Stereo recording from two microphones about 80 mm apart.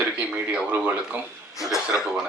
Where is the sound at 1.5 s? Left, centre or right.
Left.